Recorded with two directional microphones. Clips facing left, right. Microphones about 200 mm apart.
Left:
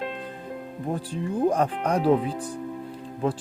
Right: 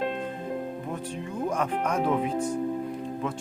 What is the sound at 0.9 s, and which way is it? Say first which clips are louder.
Speech: left 4 dB; 35° left (ahead or behind).